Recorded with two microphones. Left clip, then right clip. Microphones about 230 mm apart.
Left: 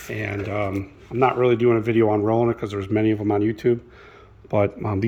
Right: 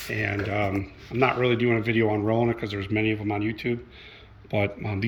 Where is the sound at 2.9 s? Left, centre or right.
Left.